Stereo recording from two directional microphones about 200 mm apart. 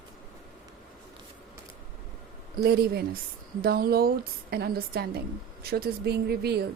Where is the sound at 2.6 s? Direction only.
50° right (ahead or behind).